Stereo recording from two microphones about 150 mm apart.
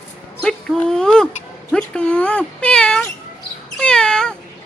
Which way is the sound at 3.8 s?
5° left (ahead or behind).